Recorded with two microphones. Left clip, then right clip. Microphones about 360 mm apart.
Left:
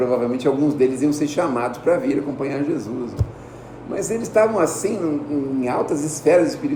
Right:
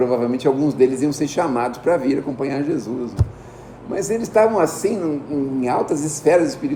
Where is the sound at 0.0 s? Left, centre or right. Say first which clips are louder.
Right 1 dB; right.